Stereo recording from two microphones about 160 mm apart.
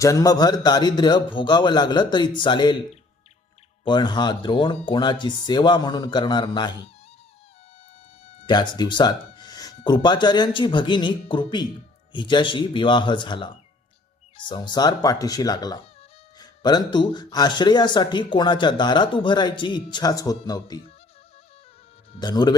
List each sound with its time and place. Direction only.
0.0 s speech: 20° left (ahead or behind)
3.8 s speech: 30° left (ahead or behind)
8.4 s speech: 25° left (ahead or behind)
22.2 s speech: 25° left (ahead or behind)